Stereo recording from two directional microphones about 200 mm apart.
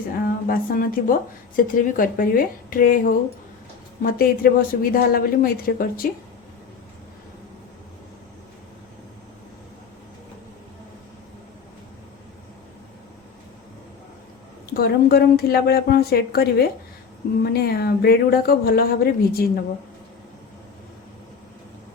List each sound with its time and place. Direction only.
0.2 s speech: 45° left (ahead or behind)
14.7 s speech: 50° left (ahead or behind)